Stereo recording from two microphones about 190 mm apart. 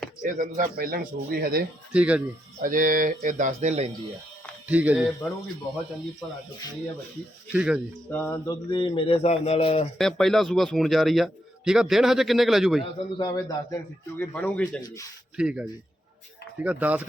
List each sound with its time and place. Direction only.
0.2 s speech: 45° right (ahead or behind)
1.9 s a man's voice: 5° right (ahead or behind)
2.6 s speech: 45° right (ahead or behind)
4.7 s speech: 10° right (ahead or behind)
6.2 s a man's voice: centre (ahead or behind)
7.5 s a man's voice: 5° right (ahead or behind)
8.1 s speech: 10° left (ahead or behind)
8.7 s speech: 25° left (ahead or behind)
10.0 s a man's voice: centre (ahead or behind)
12.8 s a man's voice: 20° left (ahead or behind)
14.2 s speech: 10° left (ahead or behind)
14.8 s speech: 20° left (ahead or behind)
15.4 s a man's voice: 5° right (ahead or behind)